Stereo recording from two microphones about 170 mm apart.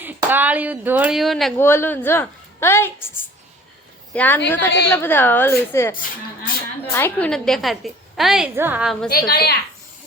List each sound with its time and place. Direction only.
0.0 s speech: 10° right (ahead or behind)
1.5 s a woman's voice: 15° left (ahead or behind)
4.1 s a woman's voice: 10° left (ahead or behind)
6.9 s a woman's voice: 10° left (ahead or behind); by 8.9 s 10° right (ahead or behind)
9.0 s a woman's voice: 65° left (ahead or behind)